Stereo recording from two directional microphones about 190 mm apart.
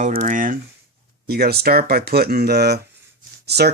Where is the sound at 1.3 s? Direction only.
55° right (ahead or behind).